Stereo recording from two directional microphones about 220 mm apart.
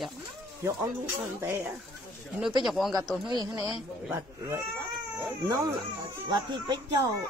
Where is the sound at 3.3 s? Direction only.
15° right (ahead or behind).